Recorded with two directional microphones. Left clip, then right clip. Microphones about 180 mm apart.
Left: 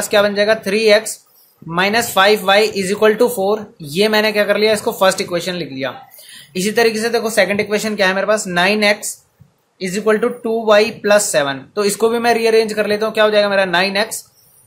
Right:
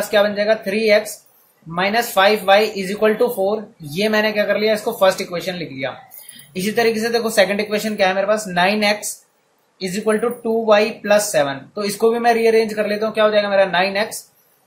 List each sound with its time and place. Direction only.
0.1 s speech: 40° left (ahead or behind)